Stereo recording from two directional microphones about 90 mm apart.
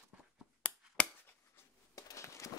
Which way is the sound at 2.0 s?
35° left (ahead or behind).